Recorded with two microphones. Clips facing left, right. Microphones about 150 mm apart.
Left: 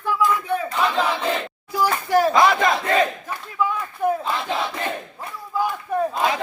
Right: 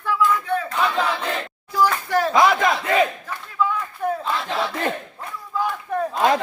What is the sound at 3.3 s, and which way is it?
Battle cry, 15° left (ahead or behind).